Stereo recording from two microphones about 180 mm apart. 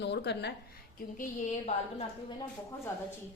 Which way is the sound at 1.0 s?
55° left (ahead or behind).